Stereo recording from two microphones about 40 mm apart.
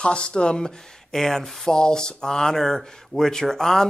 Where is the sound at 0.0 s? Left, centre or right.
Left.